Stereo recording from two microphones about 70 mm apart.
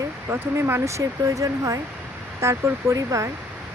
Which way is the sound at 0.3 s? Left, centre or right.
Right.